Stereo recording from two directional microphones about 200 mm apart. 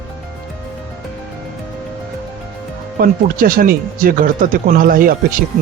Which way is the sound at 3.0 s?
45° right (ahead or behind).